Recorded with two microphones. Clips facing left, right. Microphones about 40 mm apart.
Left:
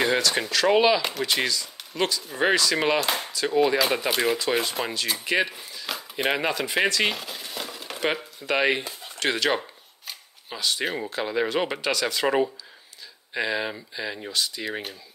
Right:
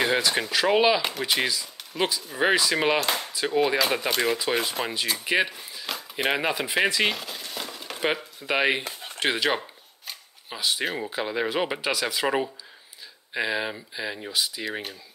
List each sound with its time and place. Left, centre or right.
0.2 s speech: centre
5.9 s a sound: centre
6.9 s speech: centre
8.8 s bird: right
9.2 s speech: centre
9.6 s a sound: centre
10.6 s speech: centre